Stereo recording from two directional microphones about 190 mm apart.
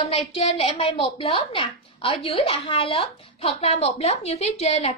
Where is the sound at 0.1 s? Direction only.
30° left (ahead or behind).